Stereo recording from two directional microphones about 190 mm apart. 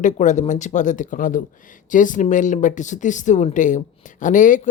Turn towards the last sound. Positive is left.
turn(degrees=45)  # may be behind; listen again after turning